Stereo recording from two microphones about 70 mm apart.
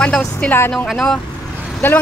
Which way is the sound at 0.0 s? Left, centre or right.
Centre.